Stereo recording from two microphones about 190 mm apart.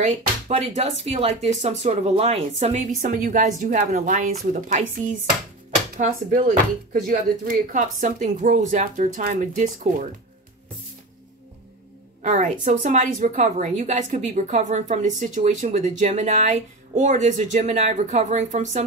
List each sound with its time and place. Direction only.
0.5 s a woman's voice: 35° right (ahead or behind)
3.0 s speech: 45° right (ahead or behind)
5.9 s speech: 40° right (ahead or behind)
12.2 s a woman's voice: 40° right (ahead or behind)